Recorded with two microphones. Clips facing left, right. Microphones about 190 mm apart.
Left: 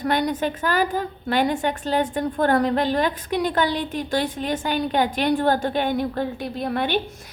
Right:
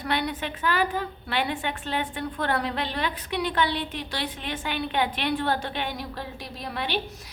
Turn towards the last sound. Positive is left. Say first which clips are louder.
# left 6 dB
turn(degrees=50)  # may be behind; listen again after turning